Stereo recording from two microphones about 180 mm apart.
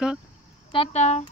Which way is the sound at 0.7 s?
35° left (ahead or behind).